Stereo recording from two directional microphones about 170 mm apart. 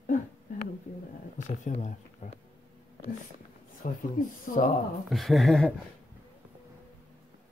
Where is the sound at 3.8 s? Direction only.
55° left (ahead or behind).